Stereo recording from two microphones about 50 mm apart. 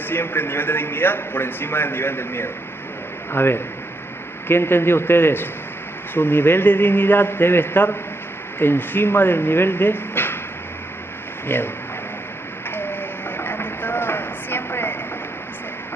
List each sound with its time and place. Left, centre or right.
0.1 s a man's voice: left
11.4 s a man's voice: left
13.4 s a sound: left